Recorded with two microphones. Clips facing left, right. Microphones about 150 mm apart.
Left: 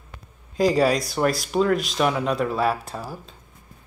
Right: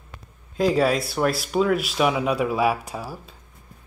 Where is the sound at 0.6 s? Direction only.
Centre (ahead or behind).